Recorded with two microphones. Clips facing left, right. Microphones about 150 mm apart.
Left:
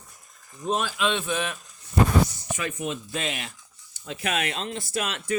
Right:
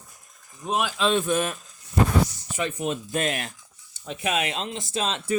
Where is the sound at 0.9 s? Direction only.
40° right (ahead or behind).